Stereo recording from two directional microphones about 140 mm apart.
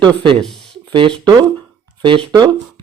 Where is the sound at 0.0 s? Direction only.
35° right (ahead or behind).